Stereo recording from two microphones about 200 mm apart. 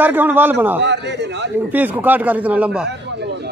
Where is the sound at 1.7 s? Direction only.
10° right (ahead or behind).